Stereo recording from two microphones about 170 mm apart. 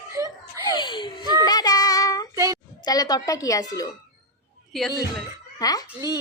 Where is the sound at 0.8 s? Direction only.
25° left (ahead or behind).